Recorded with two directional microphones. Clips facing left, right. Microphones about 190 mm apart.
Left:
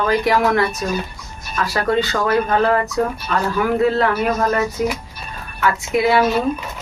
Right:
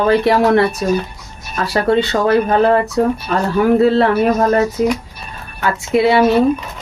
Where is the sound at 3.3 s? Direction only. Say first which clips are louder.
Right 5 dB; 40° right (ahead or behind).